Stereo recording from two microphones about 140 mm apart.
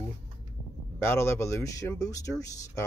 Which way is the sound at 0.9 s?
15° left (ahead or behind).